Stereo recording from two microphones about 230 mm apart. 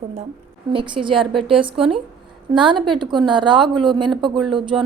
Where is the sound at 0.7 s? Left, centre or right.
Right.